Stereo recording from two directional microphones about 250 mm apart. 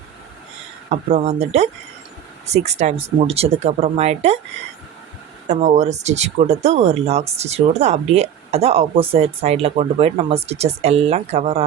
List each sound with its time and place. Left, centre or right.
0.9 s speech: right
5.5 s speech: right